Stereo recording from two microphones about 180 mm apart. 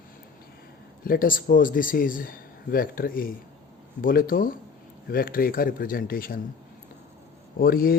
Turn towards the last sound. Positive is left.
turn(degrees=55)  # may be behind; listen again after turning